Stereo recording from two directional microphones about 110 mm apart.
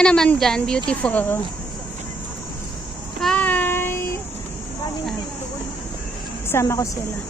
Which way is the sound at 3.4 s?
15° left (ahead or behind).